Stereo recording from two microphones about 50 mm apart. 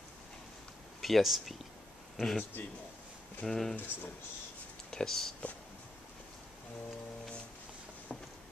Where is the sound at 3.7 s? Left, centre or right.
Left.